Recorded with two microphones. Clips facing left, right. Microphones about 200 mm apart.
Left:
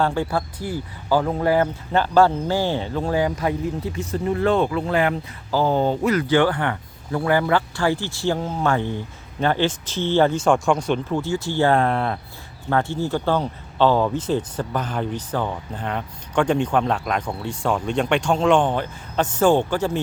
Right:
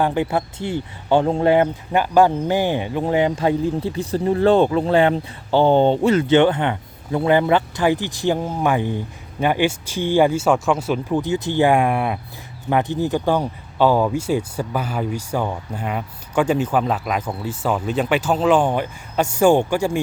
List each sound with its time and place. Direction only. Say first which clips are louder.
0.0 s speech: right 2 dB; 20° right (ahead or behind)
11.1 s speech: right 3 dB; 20° right (ahead or behind)